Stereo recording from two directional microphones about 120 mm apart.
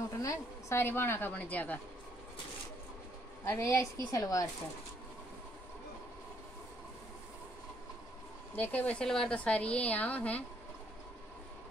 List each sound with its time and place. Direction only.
0.2 s a woman's voice: 25° left (ahead or behind)
3.4 s a woman's voice: 20° left (ahead or behind)
8.5 s a woman's voice: 15° left (ahead or behind)